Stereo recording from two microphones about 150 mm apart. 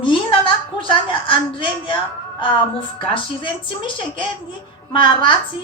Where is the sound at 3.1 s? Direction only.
35° left (ahead or behind).